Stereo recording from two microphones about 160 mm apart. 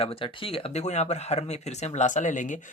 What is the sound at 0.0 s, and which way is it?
Speech, 35° left (ahead or behind).